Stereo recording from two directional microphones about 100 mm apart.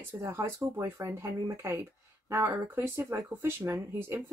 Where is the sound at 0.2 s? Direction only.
30° right (ahead or behind).